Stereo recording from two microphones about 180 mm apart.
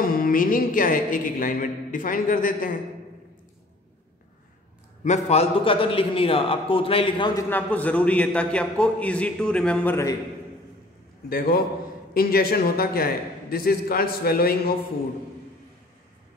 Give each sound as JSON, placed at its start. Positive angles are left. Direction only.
{"t": 0.0, "sound": "a woman's voice", "side_deg": 55}
{"t": 5.0, "sound": "a man's voice", "side_deg": 40}
{"t": 7.4, "sound": "a man's voice", "side_deg": 10}
{"t": 11.2, "sound": "a man's voice", "side_deg": 55}